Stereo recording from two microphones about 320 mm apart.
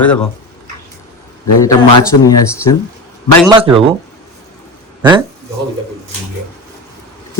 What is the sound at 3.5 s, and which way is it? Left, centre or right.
Speech, centre.